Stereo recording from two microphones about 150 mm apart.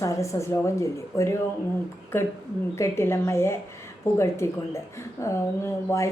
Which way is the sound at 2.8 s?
20° left (ahead or behind).